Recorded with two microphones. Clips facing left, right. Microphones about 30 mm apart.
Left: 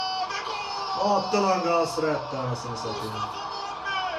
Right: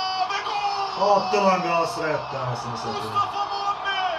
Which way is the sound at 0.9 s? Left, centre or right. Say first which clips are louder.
Right 3 dB; right.